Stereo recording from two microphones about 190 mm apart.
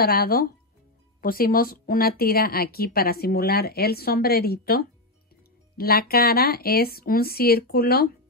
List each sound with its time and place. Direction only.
0.0 s speech: 50° left (ahead or behind)